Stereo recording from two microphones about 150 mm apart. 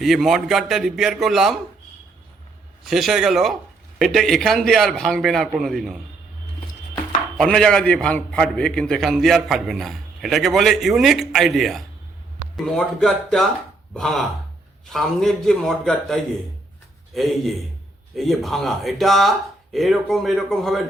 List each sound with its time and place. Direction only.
0.0 s a man's voice: centre (ahead or behind)
2.8 s a man's voice: centre (ahead or behind)
7.3 s a man's voice: centre (ahead or behind)